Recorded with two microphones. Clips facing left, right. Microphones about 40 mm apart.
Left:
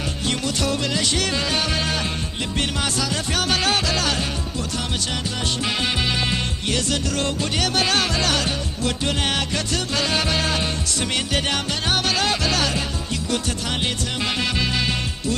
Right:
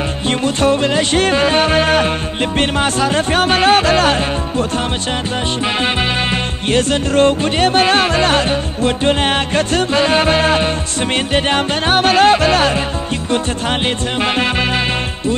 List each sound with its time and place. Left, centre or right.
0.3 s music: right
6.3 s music: right
14.2 s music: right